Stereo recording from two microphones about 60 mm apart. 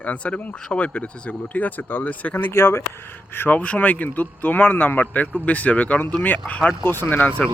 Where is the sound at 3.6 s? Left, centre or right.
Left.